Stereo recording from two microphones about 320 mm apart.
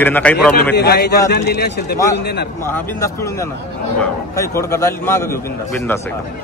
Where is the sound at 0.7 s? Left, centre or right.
Left.